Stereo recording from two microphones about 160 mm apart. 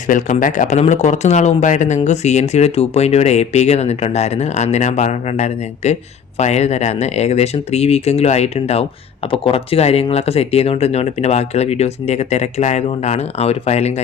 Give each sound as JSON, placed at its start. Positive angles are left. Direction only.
{"t": 0.1, "sound": "speech", "side_deg": 55}